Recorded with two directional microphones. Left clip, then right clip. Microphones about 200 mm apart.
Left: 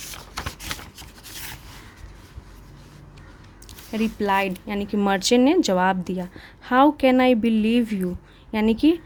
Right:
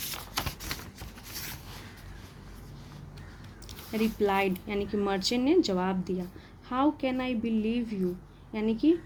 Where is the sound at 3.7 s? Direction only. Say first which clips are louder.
Left 4 dB; 25° left (ahead or behind).